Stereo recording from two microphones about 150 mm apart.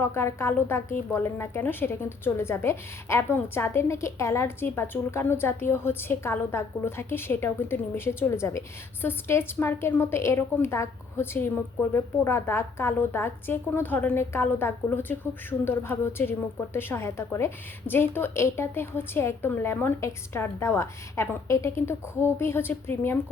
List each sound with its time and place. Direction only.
0.0 s a woman's voice: 15° left (ahead or behind)